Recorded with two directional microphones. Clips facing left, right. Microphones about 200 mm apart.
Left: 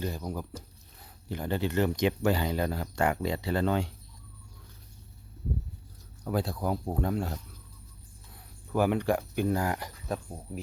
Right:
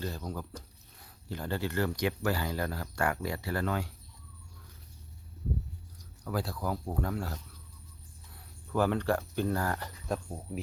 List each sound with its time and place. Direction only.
0.0 s speech: 15° left (ahead or behind)
6.2 s speech: 20° left (ahead or behind)
8.7 s speech: 15° left (ahead or behind)
10.1 s speech: centre (ahead or behind)